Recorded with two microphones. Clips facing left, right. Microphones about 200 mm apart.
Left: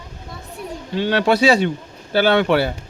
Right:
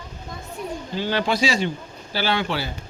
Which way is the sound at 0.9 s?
70° left (ahead or behind).